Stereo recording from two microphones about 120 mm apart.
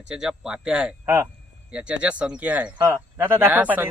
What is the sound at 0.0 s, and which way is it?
Speech, 5° right (ahead or behind).